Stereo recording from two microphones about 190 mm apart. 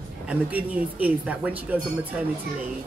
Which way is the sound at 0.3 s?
10° right (ahead or behind).